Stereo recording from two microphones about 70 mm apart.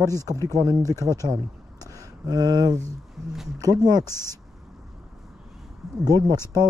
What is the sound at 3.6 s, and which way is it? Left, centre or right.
Speech, right.